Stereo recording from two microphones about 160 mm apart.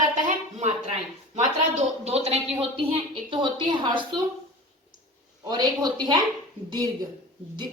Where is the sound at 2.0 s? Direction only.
40° right (ahead or behind).